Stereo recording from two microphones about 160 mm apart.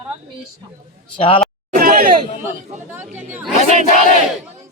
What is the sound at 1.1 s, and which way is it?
Speech, 35° left (ahead or behind).